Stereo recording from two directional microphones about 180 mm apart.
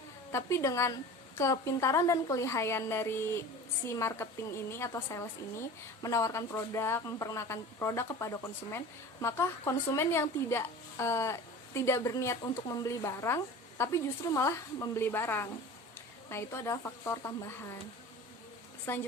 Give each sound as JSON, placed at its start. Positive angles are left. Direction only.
{"t": 0.3, "sound": "speech", "side_deg": 15}
{"t": 18.9, "sound": "speech", "side_deg": 10}